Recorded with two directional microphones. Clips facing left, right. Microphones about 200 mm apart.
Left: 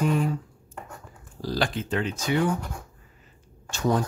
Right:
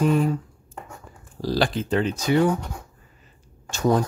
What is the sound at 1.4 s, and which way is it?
Speech, 35° right (ahead or behind).